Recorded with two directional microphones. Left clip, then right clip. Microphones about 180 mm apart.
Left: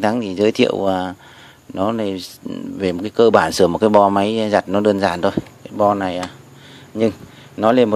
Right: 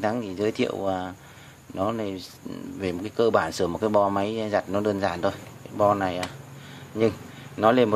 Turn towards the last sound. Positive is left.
turn(degrees=35)  # may be behind; listen again after turning